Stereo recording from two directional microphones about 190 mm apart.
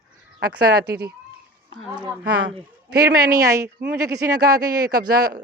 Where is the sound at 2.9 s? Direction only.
55° right (ahead or behind).